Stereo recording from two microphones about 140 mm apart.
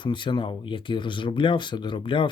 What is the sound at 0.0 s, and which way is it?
Speech, 35° left (ahead or behind).